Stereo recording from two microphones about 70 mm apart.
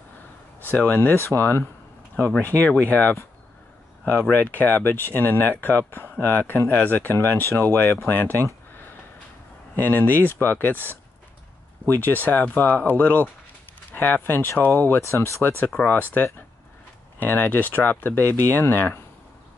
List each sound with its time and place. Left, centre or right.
0.6 s speech: left
1.1 s speech: left
2.4 s speech: left
9.8 s speech: left
15.0 s speech: left
15.4 s speech: left